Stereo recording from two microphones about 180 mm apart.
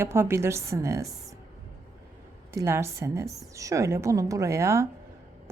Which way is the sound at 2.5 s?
15° right (ahead or behind).